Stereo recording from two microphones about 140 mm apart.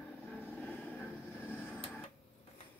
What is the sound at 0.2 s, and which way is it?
Vehicle, 15° left (ahead or behind).